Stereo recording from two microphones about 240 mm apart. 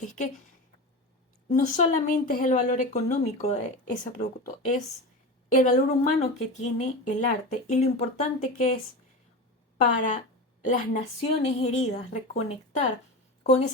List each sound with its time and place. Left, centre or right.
1.5 s a woman's voice: left
9.8 s a woman's voice: left